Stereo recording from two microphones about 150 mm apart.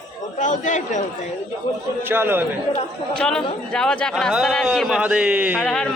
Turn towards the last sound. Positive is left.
turn(degrees=5)  # may be behind; listen again after turning